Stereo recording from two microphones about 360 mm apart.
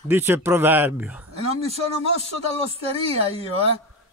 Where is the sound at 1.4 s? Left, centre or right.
Centre.